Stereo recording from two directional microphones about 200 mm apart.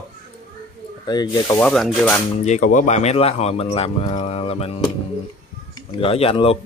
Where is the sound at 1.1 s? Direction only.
20° left (ahead or behind).